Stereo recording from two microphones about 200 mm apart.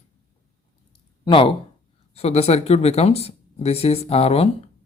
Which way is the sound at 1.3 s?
25° left (ahead or behind).